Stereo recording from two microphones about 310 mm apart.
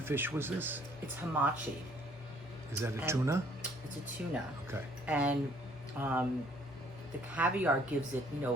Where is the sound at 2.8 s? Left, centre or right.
Centre.